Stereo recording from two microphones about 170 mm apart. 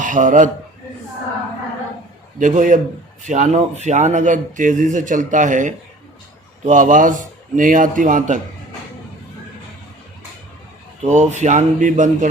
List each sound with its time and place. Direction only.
0.0 s speech: 50° right (ahead or behind)
2.4 s speech: 50° right (ahead or behind)
11.0 s speech: 45° right (ahead or behind)